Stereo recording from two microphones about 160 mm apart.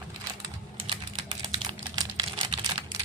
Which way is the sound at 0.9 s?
30° right (ahead or behind).